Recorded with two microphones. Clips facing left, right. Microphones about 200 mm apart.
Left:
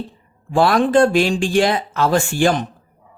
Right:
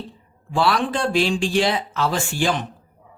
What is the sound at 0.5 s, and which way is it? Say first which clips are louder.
Speech: left 7 dB; 50° left (ahead or behind).